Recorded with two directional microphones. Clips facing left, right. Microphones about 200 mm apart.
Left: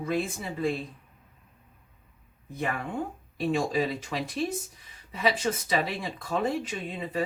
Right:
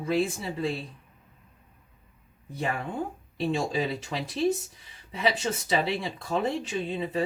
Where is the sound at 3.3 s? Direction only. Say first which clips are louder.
Left 1 dB; 25° right (ahead or behind).